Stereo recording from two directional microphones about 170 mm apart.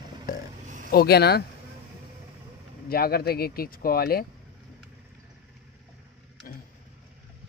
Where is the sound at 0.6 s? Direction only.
45° right (ahead or behind).